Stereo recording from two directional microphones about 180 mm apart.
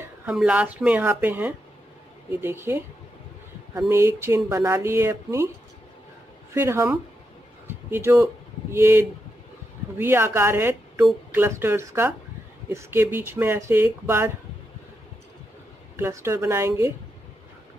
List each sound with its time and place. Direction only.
0.2 s speech: 5° right (ahead or behind)
6.5 s speech: 15° right (ahead or behind)
16.0 s speech: 15° right (ahead or behind)